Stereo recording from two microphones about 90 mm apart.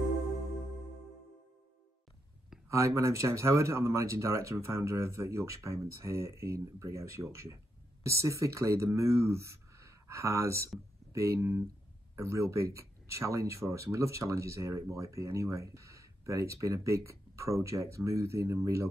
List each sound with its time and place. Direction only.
2.7 s speech: 35° right (ahead or behind)